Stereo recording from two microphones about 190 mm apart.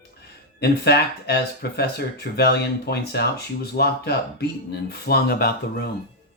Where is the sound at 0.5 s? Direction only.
60° left (ahead or behind).